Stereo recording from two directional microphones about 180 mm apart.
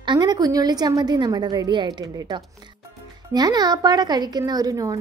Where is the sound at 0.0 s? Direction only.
25° right (ahead or behind).